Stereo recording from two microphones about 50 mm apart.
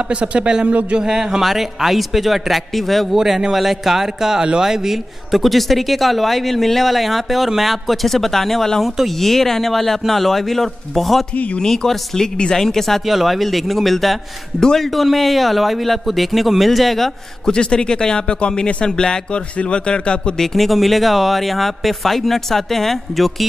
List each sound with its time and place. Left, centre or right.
0.1 s speech: right
0.9 s speech: centre
3.2 s a man's voice: centre
13.0 s speech: centre
14.6 s speech: centre
14.9 s speech: centre
17.5 s speech: centre
20.5 s speech: centre